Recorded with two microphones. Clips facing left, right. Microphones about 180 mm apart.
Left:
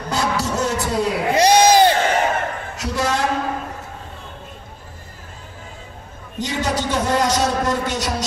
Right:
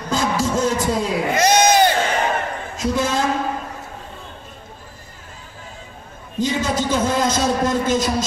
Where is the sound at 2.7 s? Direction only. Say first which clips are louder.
Right 2 dB; 70° left (ahead or behind).